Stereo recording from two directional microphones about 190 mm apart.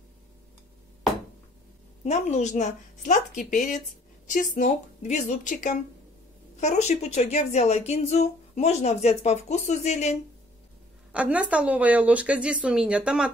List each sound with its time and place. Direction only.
2.0 s speech: 35° left (ahead or behind)
11.1 s a woman's voice: 5° right (ahead or behind)